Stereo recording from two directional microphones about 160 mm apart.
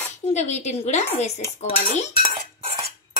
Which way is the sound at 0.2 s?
45° left (ahead or behind).